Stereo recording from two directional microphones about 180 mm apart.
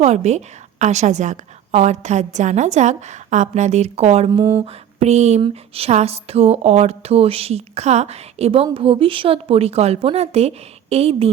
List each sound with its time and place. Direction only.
0.0 s speech: 40° right (ahead or behind)
4.4 s mantra: 15° right (ahead or behind)
4.6 s a sound: 35° right (ahead or behind)
5.4 s speech: 35° right (ahead or behind)